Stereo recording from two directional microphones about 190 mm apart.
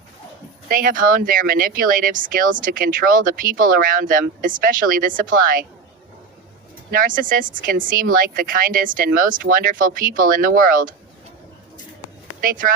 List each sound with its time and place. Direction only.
0.7 s speech: 50° right (ahead or behind)
6.9 s speech: 45° right (ahead or behind)
12.4 s speech: 50° right (ahead or behind)